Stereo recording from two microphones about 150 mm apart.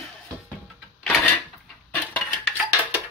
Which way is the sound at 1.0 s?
5° left (ahead or behind).